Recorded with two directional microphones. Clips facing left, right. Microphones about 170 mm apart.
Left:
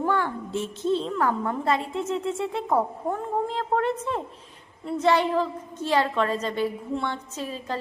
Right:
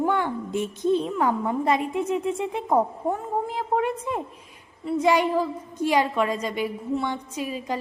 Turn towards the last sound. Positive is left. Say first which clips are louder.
# right 3 dB
turn(degrees=-10)  # may be behind; listen again after turning